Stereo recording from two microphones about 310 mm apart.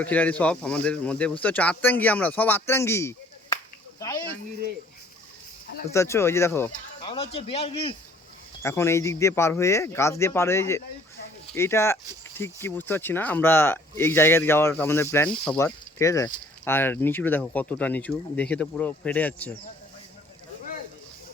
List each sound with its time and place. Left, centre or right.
0.0 s speech: centre
5.9 s speech: centre